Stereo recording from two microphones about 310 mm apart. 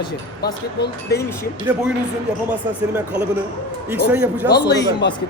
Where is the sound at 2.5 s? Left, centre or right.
Centre.